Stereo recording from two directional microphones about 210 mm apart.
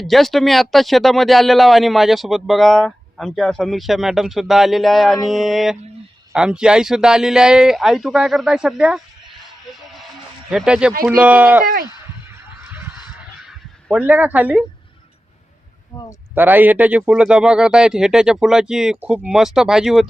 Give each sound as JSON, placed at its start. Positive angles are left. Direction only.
{"t": 0.0, "sound": "speech", "side_deg": 0}
{"t": 9.7, "sound": "music", "side_deg": 0}
{"t": 10.5, "sound": "speech", "side_deg": -5}
{"t": 13.5, "sound": "a sound", "side_deg": -5}
{"t": 15.9, "sound": "a sound", "side_deg": 20}
{"t": 16.3, "sound": "speech", "side_deg": -10}